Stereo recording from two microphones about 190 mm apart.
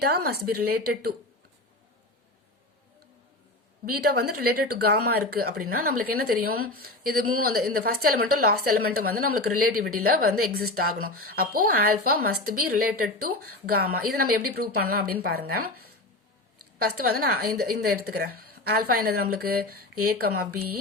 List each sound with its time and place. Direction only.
0.0 s a woman's voice: 55° right (ahead or behind)
3.8 s speech: 50° right (ahead or behind)